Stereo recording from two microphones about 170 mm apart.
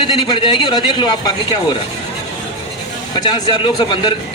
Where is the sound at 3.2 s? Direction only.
25° left (ahead or behind).